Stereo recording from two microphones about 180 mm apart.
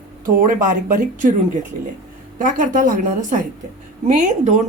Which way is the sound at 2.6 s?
45° right (ahead or behind).